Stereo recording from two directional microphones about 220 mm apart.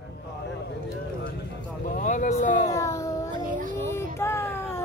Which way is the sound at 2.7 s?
15° left (ahead or behind).